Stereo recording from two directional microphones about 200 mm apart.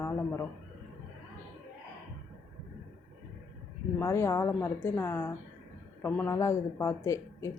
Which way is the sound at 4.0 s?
15° left (ahead or behind).